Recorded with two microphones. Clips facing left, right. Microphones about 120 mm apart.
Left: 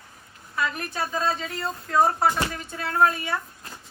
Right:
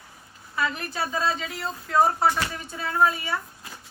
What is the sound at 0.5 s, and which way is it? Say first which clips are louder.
A woman's voice: even; centre (ahead or behind).